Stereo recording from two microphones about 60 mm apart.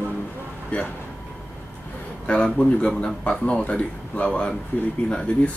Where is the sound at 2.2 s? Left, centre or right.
Centre.